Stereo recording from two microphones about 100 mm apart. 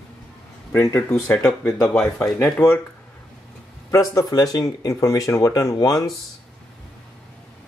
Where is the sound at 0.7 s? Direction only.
25° left (ahead or behind).